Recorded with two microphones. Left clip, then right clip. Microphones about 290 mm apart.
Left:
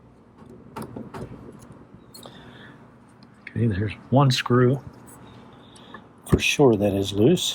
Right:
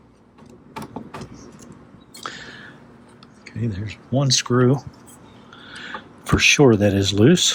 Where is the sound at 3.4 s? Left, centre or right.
Centre.